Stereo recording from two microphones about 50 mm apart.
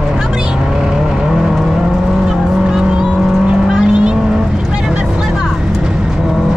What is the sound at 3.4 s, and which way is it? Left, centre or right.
Vehicle, centre.